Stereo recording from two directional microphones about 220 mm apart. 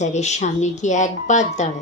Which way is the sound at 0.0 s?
30° left (ahead or behind).